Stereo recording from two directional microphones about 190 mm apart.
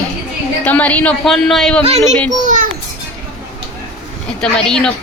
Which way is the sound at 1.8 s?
35° right (ahead or behind).